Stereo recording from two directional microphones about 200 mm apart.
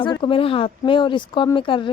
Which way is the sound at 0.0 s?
25° left (ahead or behind).